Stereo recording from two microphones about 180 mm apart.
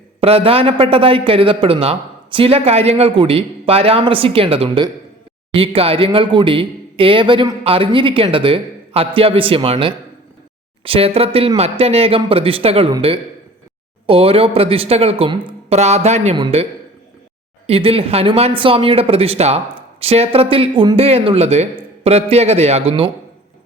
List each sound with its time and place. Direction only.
0.2 s speech: 35° right (ahead or behind)
17.7 s speech: 35° right (ahead or behind)